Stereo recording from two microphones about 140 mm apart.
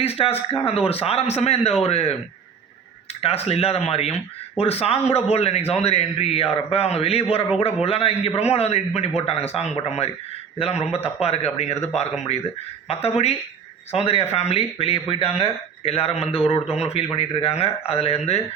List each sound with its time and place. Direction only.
0.0 s a man's voice: 45° left (ahead or behind)
3.2 s a man's voice: 45° left (ahead or behind)